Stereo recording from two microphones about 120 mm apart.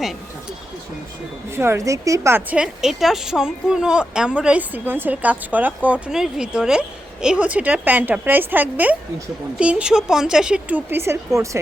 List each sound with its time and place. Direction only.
1.5 s a woman's voice: 20° right (ahead or behind)
2.6 s speech: 5° right (ahead or behind); by 11.4 s 25° right (ahead or behind)